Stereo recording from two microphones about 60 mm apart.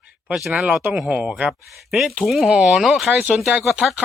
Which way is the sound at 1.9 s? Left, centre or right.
Centre.